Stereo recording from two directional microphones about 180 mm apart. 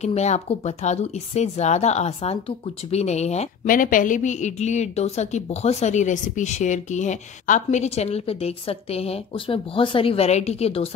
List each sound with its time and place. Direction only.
0.0 s speech: 40° left (ahead or behind)